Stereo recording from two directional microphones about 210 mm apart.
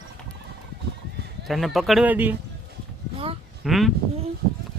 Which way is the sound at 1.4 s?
Centre (ahead or behind).